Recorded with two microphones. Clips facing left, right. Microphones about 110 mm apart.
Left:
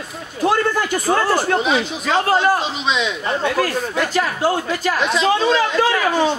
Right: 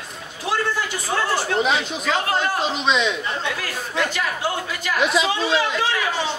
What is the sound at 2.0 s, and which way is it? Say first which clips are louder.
Speech: left 5 dB; 40° left (ahead or behind).